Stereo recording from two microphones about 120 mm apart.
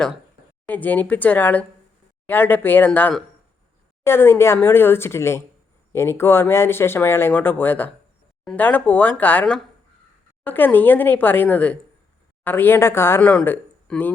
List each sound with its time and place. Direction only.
0.7 s speech: 15° left (ahead or behind)